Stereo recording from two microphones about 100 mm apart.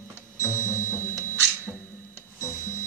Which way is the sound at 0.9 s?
25° left (ahead or behind).